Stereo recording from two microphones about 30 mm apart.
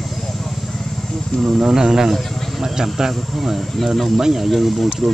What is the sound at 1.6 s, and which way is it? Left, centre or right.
Speech, centre.